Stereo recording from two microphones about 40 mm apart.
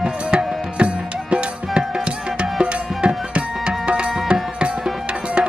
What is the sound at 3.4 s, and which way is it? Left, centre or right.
Tabla, right.